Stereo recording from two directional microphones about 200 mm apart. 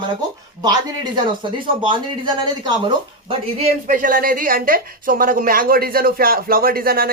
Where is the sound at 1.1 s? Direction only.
25° right (ahead or behind).